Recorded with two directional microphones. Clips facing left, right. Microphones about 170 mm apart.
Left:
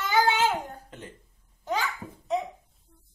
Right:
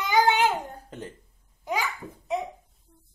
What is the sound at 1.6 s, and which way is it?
Babbling, 10° right (ahead or behind).